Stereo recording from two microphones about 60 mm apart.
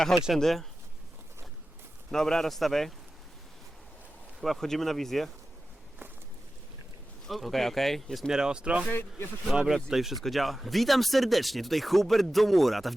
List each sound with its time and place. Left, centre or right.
0.3 s speech: centre
2.0 s speech: centre
4.4 s speech: centre
7.3 s speech: centre
8.3 s speech: centre
8.9 s speech: left
9.5 s speech: centre